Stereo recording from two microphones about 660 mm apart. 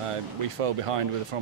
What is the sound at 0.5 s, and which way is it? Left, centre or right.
Speech, right.